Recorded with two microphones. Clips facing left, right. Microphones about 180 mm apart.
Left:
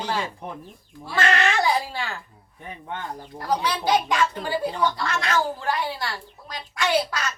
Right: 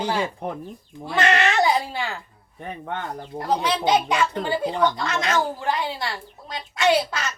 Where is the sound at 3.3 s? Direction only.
25° right (ahead or behind).